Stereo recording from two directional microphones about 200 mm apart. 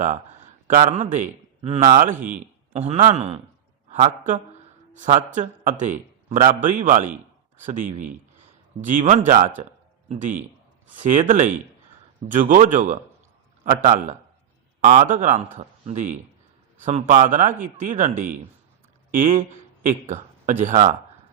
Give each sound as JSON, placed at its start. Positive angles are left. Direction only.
{"t": 0.7, "sound": "a man's voice", "side_deg": -40}